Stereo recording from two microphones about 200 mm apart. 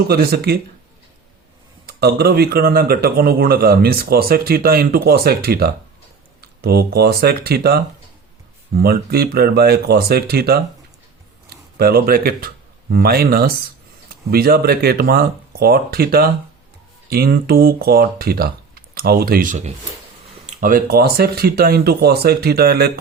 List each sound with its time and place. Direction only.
0.1 s speech: 50° right (ahead or behind)
1.9 s speech: 50° right (ahead or behind)
8.8 s speech: 50° right (ahead or behind)